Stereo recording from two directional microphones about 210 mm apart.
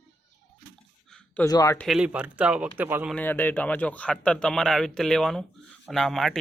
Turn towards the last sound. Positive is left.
turn(degrees=0)  # may be behind; listen again after turning